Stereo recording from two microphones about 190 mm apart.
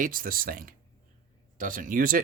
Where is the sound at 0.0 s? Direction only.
45° right (ahead or behind).